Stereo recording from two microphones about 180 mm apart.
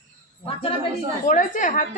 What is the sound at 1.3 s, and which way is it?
Speech, 45° left (ahead or behind).